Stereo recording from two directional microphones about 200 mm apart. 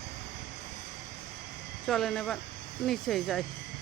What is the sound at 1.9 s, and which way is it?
Speech, centre (ahead or behind).